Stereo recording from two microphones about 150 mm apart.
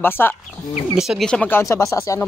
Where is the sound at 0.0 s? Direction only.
15° left (ahead or behind).